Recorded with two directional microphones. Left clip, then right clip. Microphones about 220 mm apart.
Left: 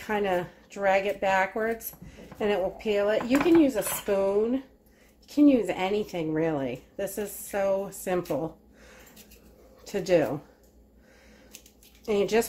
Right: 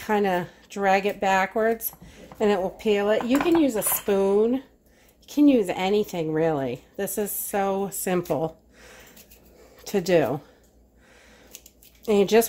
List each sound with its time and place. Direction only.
0.0 s speech: 40° right (ahead or behind)
8.3 s a sound: 40° right (ahead or behind)
9.8 s speech: 40° right (ahead or behind)
12.0 s a woman's voice: 40° right (ahead or behind)